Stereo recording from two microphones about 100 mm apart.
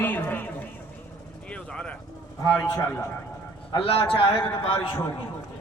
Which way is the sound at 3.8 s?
70° left (ahead or behind).